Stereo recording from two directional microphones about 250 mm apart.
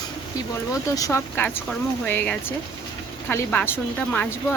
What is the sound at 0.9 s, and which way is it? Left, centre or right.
Speech, centre.